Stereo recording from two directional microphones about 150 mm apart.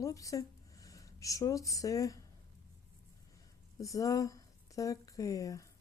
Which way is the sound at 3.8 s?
20° left (ahead or behind).